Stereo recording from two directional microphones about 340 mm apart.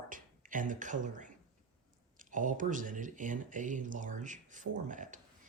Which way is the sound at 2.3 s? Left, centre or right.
Right.